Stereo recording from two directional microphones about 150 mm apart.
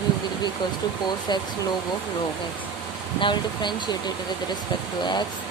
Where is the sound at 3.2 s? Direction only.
30° left (ahead or behind).